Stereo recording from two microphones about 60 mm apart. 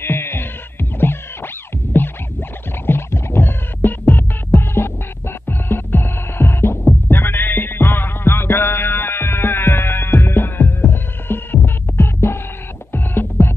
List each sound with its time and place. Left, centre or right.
0.0 s music: left